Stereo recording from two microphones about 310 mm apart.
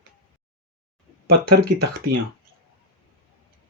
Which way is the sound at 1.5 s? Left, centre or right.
Right.